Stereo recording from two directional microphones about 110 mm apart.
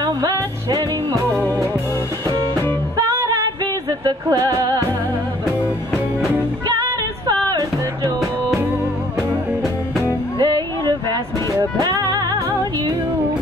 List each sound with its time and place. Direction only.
0.0 s music: 40° right (ahead or behind)
1.3 s music: 15° left (ahead or behind)
4.0 s music: 35° right (ahead or behind)
10.4 s music: 40° right (ahead or behind)